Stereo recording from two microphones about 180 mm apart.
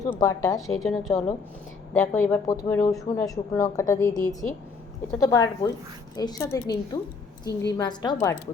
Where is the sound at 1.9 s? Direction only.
10° left (ahead or behind).